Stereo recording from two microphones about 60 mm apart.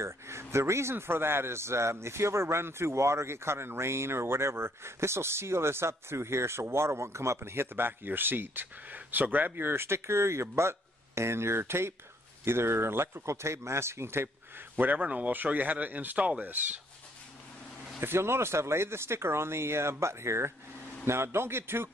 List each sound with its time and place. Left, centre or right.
0.0 s a man's voice: right
14.8 s speech: right
18.0 s a man's voice: right